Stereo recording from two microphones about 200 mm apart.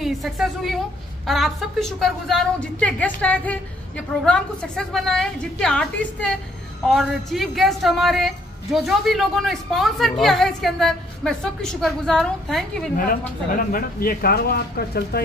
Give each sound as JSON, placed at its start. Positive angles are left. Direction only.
{"t": 0.0, "sound": "a woman's voice", "side_deg": 0}
{"t": 12.9, "sound": "speech", "side_deg": 45}